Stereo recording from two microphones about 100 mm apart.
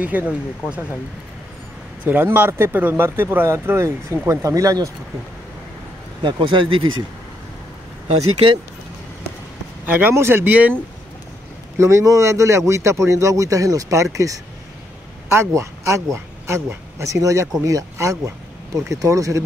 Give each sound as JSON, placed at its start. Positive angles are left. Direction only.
{"t": 0.0, "sound": "speech", "side_deg": -15}
{"t": 2.0, "sound": "speech", "side_deg": -20}
{"t": 6.2, "sound": "speech", "side_deg": -55}
{"t": 9.8, "sound": "speech", "side_deg": -20}
{"t": 11.8, "sound": "a man's voice", "side_deg": -30}